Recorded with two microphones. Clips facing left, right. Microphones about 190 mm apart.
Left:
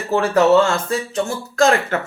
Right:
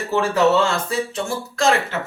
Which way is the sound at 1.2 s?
45° left (ahead or behind).